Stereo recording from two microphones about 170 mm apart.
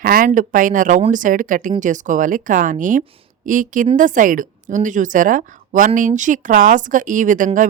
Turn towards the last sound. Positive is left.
turn(degrees=-50)  # may be behind; listen again after turning